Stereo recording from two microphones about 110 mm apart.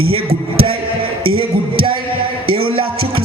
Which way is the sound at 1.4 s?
55° right (ahead or behind).